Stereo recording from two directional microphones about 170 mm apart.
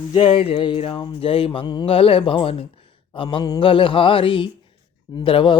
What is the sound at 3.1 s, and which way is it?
Speech, 25° left (ahead or behind).